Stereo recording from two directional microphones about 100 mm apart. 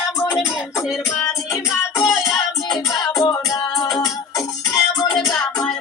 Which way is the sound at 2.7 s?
40° left (ahead or behind).